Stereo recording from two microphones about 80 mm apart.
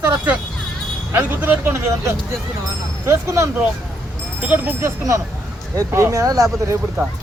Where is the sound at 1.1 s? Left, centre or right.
Right.